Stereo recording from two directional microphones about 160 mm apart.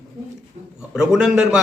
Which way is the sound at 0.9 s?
5° right (ahead or behind).